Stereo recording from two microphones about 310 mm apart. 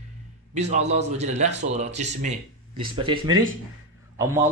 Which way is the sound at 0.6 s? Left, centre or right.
Right.